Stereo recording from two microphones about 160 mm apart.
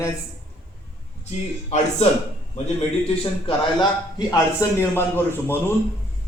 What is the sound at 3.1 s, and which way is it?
Speech, 35° left (ahead or behind).